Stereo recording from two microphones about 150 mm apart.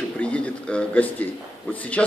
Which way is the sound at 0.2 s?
10° left (ahead or behind).